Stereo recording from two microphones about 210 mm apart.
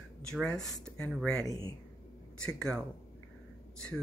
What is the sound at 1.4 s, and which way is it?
Speech, 15° left (ahead or behind).